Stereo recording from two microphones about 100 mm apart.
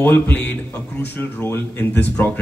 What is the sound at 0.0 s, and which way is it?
A man's voice, 15° left (ahead or behind).